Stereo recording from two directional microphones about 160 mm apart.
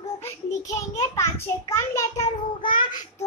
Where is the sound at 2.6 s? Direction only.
30° left (ahead or behind).